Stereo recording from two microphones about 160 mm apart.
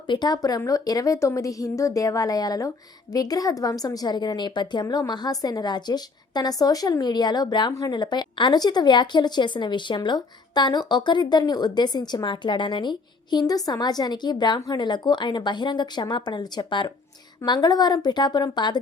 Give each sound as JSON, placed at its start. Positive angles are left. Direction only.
{"t": 0.1, "sound": "a woman's voice", "side_deg": 25}